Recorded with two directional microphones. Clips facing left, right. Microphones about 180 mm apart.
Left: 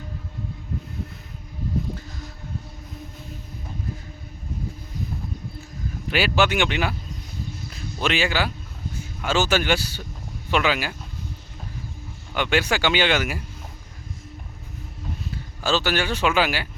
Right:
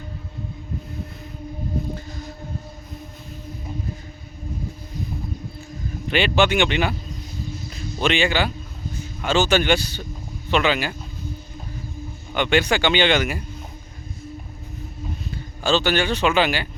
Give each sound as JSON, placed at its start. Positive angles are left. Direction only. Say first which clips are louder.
{"t": 6.1, "sound": "speech", "louder": "right 2 dB", "side_deg": 5}
{"t": 7.4, "sound": "a sound", "louder": "right 4 dB", "side_deg": 60}
{"t": 8.0, "sound": "speech", "louder": "right 3 dB", "side_deg": 5}
{"t": 12.3, "sound": "speech", "louder": "right 3 dB", "side_deg": 5}
{"t": 15.3, "sound": "speech", "louder": "right 3 dB", "side_deg": 5}